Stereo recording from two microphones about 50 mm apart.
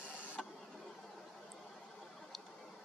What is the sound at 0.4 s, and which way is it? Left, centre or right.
Printer, centre.